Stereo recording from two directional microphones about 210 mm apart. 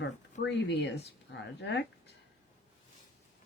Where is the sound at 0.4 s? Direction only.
55° left (ahead or behind).